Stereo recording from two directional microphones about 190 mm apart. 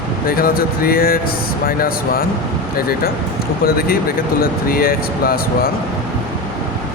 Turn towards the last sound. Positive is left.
turn(degrees=50)  # may be behind; listen again after turning